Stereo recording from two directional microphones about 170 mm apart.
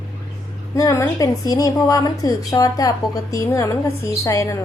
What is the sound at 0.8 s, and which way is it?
A woman's voice, 20° left (ahead or behind).